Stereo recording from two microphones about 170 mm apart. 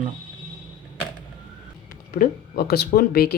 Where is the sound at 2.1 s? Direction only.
70° left (ahead or behind).